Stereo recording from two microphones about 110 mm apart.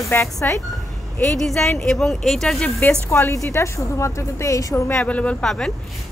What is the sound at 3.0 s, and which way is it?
A woman's voice, 25° left (ahead or behind).